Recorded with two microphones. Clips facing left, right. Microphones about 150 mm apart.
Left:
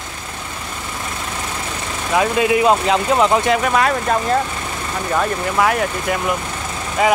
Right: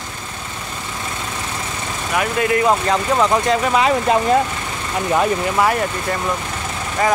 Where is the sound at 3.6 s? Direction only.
5° right (ahead or behind).